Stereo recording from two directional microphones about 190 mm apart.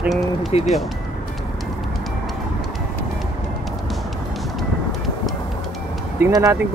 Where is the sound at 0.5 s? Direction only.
30° left (ahead or behind).